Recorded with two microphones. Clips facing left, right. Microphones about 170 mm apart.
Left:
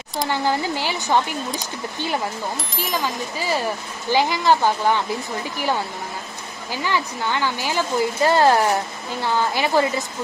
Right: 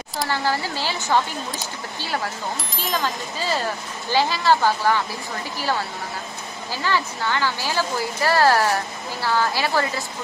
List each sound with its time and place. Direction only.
0.3 s speech: 20° left (ahead or behind)
2.7 s speech: 5° left (ahead or behind)
6.7 s speech: 15° left (ahead or behind)